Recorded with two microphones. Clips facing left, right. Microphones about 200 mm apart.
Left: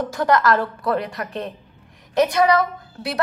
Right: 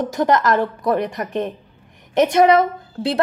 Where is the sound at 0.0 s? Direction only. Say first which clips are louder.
Right 1 dB; 20° right (ahead or behind).